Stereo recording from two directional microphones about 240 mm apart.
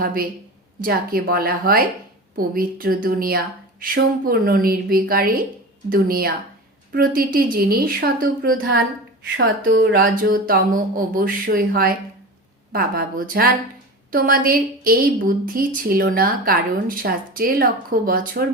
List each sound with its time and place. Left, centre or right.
0.0 s a woman's voice: right
9.4 s speech: right
10.0 s a woman's voice: right